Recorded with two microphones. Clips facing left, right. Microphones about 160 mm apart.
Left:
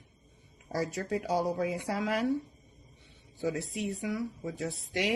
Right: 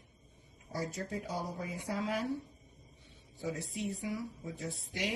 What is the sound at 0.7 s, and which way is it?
A woman's voice, 85° left.